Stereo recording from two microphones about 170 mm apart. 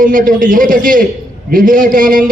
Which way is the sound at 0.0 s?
55° right (ahead or behind).